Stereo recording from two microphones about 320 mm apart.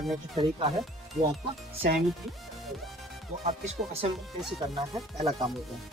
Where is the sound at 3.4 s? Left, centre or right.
Centre.